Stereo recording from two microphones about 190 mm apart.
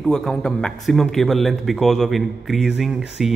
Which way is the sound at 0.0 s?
Centre (ahead or behind).